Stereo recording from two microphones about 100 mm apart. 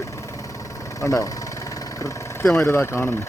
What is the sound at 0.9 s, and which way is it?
Engine, 35° left (ahead or behind).